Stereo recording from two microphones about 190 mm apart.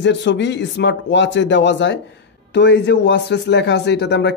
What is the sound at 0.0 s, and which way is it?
Speech, 70° left (ahead or behind).